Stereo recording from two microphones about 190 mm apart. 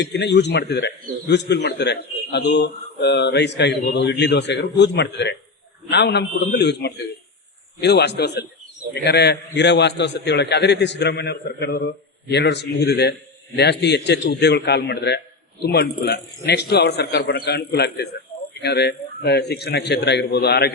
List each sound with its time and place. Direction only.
0.0 s a man's voice: 65° left (ahead or behind)